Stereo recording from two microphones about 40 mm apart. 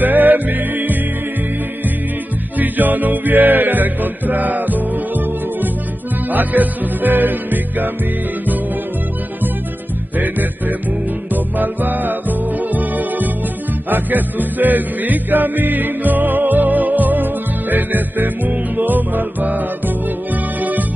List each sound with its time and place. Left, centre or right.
0.0 s music: right
2.6 s music: right
11.3 s music: right